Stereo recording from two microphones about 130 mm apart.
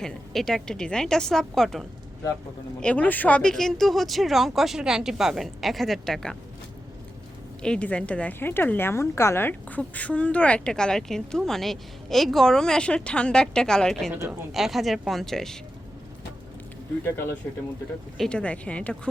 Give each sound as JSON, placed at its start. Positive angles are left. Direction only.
{"t": 0.0, "sound": "speech", "side_deg": 5}
{"t": 7.6, "sound": "a woman's voice", "side_deg": 10}
{"t": 14.1, "sound": "a woman's voice", "side_deg": -15}
{"t": 14.5, "sound": "speech", "side_deg": 0}
{"t": 17.1, "sound": "a woman's voice", "side_deg": 20}